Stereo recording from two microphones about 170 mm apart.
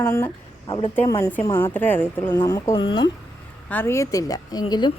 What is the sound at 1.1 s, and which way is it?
A woman's voice, 15° left (ahead or behind).